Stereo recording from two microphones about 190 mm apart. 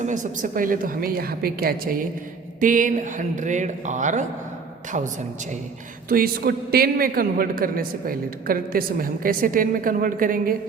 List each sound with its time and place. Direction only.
0.0 s a man's voice: 40° right (ahead or behind)
6.1 s a man's voice: 50° right (ahead or behind)